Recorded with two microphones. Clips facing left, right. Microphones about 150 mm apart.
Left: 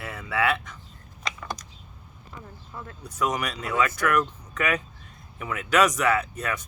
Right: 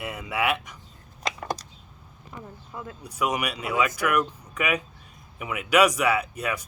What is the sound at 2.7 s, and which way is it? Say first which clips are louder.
Speech: right 2 dB; 15° right (ahead or behind).